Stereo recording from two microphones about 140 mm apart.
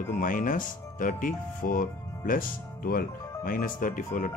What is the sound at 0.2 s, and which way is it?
Speech, 75° left (ahead or behind).